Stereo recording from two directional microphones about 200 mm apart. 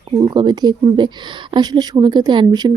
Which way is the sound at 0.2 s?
20° right (ahead or behind).